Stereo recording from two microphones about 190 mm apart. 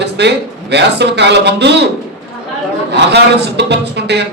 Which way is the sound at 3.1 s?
65° right (ahead or behind).